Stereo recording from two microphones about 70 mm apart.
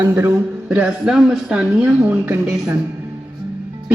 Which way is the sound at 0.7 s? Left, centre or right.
Centre.